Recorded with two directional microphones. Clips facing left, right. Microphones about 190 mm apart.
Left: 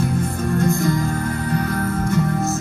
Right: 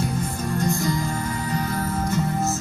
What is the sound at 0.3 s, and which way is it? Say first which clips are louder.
Music: left 5 dB; 55° left (ahead or behind).